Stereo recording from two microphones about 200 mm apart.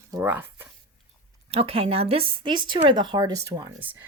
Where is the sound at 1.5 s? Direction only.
30° right (ahead or behind); by 4.0 s 15° right (ahead or behind).